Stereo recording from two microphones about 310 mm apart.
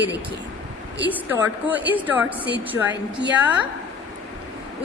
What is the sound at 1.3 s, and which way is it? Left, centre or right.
A woman's voice, centre.